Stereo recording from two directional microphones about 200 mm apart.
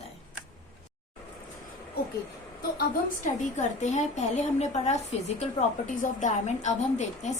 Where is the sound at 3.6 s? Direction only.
35° left (ahead or behind).